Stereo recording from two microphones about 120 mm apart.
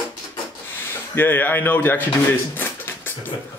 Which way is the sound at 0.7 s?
15° left (ahead or behind).